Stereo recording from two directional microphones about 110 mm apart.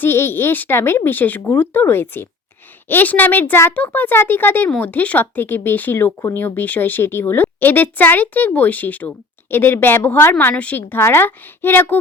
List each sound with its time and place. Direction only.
0.0 s speech: 20° left (ahead or behind)